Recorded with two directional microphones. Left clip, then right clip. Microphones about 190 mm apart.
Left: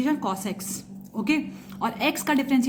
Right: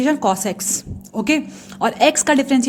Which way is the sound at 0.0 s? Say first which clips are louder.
Right 9 dB; 55° right (ahead or behind).